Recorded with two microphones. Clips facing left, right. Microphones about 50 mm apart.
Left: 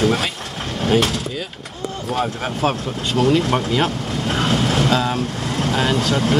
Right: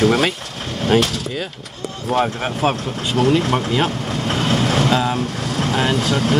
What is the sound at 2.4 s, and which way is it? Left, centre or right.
Speech, centre.